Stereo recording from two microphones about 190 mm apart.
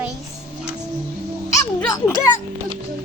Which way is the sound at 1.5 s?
15° left (ahead or behind).